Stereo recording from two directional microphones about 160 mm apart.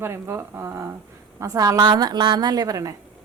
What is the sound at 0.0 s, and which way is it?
A woman's voice, 15° right (ahead or behind).